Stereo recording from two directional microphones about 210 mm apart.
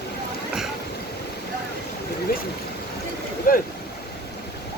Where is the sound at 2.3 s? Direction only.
45° left (ahead or behind).